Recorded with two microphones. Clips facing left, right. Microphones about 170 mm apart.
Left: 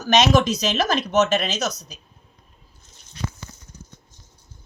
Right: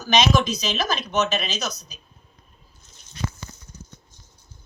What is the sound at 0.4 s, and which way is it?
A woman's voice, 75° left (ahead or behind).